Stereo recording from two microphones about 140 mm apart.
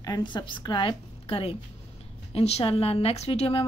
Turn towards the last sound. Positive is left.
turn(degrees=40)  # may be behind; listen again after turning